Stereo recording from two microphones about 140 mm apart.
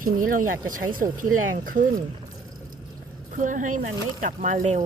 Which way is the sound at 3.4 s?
70° right (ahead or behind).